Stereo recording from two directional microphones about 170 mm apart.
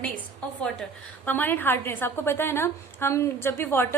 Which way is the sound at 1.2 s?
10° left (ahead or behind).